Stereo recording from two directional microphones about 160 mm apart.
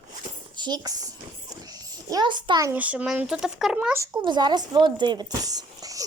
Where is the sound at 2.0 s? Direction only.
25° right (ahead or behind).